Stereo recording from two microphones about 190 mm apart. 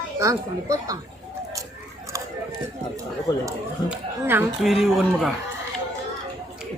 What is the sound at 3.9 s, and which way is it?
Speech, 10° right (ahead or behind).